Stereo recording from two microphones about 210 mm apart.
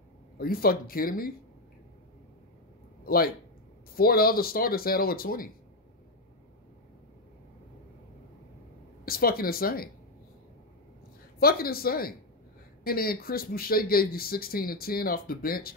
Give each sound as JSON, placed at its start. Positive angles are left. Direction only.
{"t": 0.4, "sound": "speech", "side_deg": 45}
{"t": 3.0, "sound": "a sound", "side_deg": 45}
{"t": 3.9, "sound": "speech", "side_deg": 45}
{"t": 9.0, "sound": "speech", "side_deg": 45}
{"t": 11.3, "sound": "speech", "side_deg": 45}